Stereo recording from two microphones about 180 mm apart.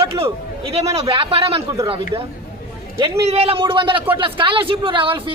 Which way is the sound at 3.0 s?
30° right (ahead or behind).